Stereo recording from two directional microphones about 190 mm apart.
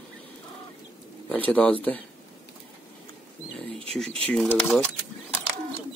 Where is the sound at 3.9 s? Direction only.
5° left (ahead or behind).